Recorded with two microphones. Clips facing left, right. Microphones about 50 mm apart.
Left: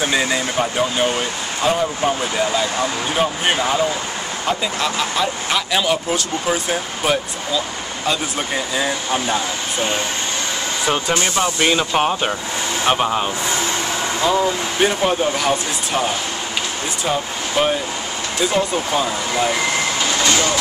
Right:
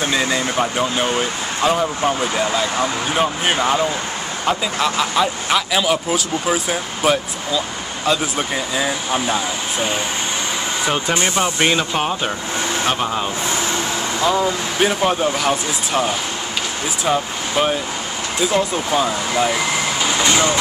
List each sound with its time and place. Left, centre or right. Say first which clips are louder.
0.0 s speech: even; centre
11.1 s speech: even; right
11.9 s speech: left 2 dB; centre
14.2 s speech: even; centre
20.1 s vehicle: right 3 dB; centre